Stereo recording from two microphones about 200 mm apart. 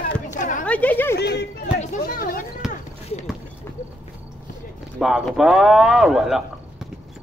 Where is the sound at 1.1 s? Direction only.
55° left (ahead or behind).